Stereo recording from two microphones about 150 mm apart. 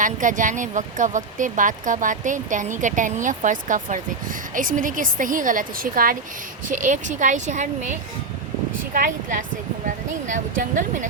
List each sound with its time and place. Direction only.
0.0 s speech: 60° right (ahead or behind)
6.7 s speech: 60° right (ahead or behind)